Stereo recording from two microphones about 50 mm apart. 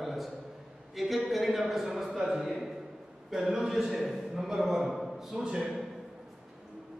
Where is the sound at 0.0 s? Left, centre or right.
Centre.